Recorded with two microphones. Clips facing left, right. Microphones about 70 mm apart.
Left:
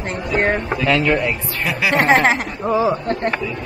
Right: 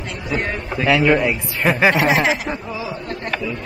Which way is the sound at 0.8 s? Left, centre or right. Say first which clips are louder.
Right 3 dB; centre.